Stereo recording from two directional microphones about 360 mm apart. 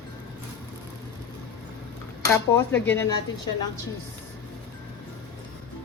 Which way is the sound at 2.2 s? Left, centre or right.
Centre.